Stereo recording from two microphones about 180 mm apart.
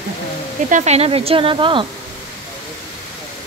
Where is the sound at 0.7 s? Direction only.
40° right (ahead or behind).